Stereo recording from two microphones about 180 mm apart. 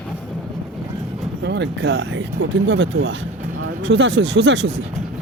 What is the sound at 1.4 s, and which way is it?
Speech, 75° right (ahead or behind).